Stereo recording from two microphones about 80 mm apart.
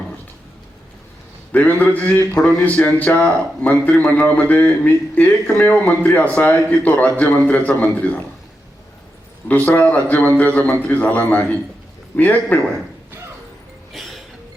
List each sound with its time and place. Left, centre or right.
1.5 s a man's voice: left
9.5 s a man's voice: left
13.9 s a sound: centre